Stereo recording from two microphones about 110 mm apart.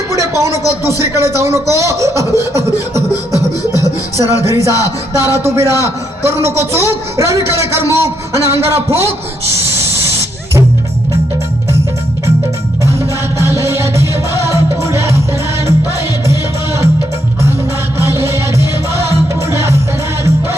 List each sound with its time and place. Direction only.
0.1 s a man's voice: 25° right (ahead or behind)
3.7 s music: 30° left (ahead or behind)
4.2 s a man's voice: 25° right (ahead or behind)
13.4 s music: 25° right (ahead or behind)
16.2 s music: 25° right (ahead or behind)
18.1 s music: 25° right (ahead or behind)